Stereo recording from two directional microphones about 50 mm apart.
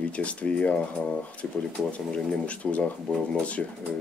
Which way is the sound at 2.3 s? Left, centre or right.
Left.